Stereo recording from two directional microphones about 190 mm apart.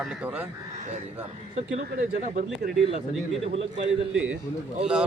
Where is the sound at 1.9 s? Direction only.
45° right (ahead or behind).